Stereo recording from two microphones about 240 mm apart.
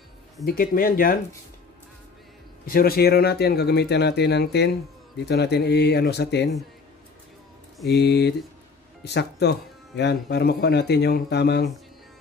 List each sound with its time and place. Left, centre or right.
0.5 s speech: left
2.6 s speech: left
7.9 s speech: left